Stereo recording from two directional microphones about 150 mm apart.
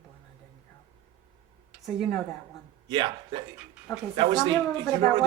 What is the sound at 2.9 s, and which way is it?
Speech, 30° right (ahead or behind).